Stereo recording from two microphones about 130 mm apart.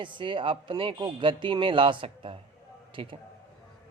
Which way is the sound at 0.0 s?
40° right (ahead or behind).